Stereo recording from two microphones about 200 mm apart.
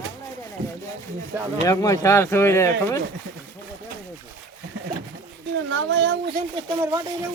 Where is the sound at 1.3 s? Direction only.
10° right (ahead or behind).